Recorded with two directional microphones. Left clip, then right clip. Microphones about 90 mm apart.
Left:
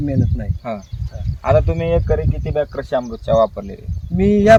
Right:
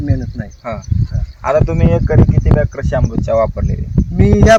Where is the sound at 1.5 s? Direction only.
30° right (ahead or behind).